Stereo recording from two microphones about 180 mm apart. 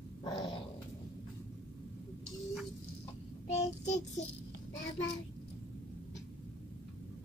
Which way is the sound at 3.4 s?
40° left (ahead or behind).